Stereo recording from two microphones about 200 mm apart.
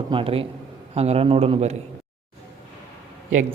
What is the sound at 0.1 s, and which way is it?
A man's voice, 25° right (ahead or behind).